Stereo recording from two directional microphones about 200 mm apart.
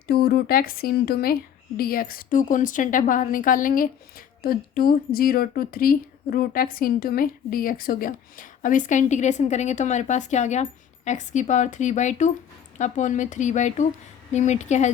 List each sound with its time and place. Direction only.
0.1 s a woman's voice: 50° left (ahead or behind); by 14.8 s 35° left (ahead or behind)